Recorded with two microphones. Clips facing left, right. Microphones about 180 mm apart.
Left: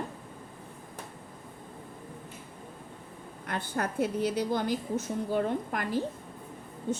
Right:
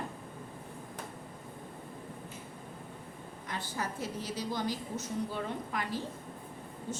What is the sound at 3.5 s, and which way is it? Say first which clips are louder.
A woman's voice: left 6 dB; 60° left (ahead or behind).